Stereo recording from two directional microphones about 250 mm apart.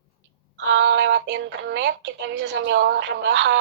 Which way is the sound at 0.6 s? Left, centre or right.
Right.